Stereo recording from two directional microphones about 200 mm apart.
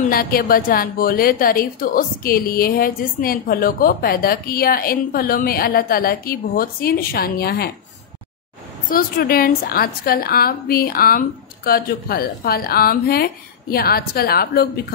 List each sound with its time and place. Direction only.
0.0 s a woman's voice: 45° left (ahead or behind)
8.8 s a woman's voice: 45° left (ahead or behind)